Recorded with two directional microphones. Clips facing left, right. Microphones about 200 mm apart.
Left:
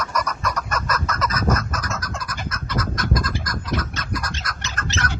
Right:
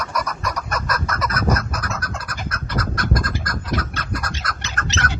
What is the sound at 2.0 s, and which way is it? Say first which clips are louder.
Bird: even; 60° right (ahead or behind).